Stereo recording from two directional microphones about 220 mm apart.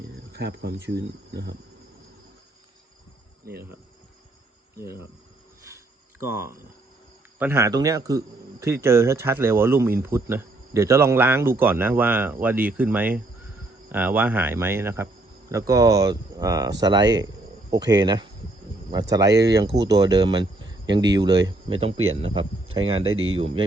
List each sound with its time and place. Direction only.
0.3 s speech: 50° right (ahead or behind)
3.4 s cricket: 45° right (ahead or behind)
6.2 s speech: 10° right (ahead or behind)
19.6 s speech: 50° right (ahead or behind)
19.9 s speech: 15° right (ahead or behind)
23.1 s speech: 70° right (ahead or behind)